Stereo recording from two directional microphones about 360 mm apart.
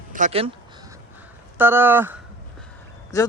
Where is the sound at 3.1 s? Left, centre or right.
Centre.